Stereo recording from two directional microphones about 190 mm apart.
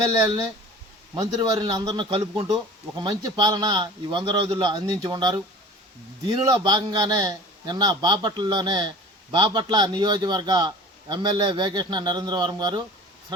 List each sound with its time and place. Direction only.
1.1 s a man's voice: 20° right (ahead or behind)